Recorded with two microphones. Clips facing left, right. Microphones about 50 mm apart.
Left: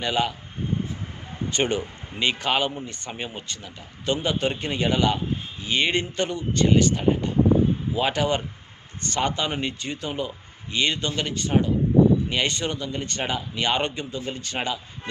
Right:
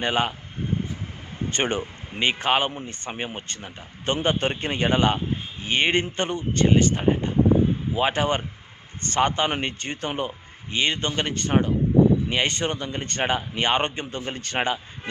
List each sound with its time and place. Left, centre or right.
0.0 s speech: right
1.5 s a man's voice: right
10.7 s speech: right
12.3 s speech: right